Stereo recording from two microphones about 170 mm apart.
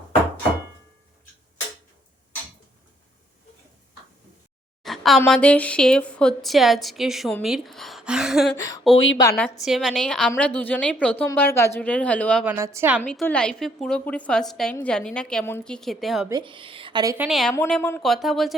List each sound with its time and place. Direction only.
4.8 s speech: centre (ahead or behind)
8.5 s speech: 20° left (ahead or behind)
9.3 s speech: centre (ahead or behind)
12.5 s a woman's voice: 15° right (ahead or behind)
13.0 s speech: 10° left (ahead or behind)
16.3 s a woman's voice: 30° right (ahead or behind)
17.2 s speech: centre (ahead or behind)
17.7 s speech: 10° left (ahead or behind)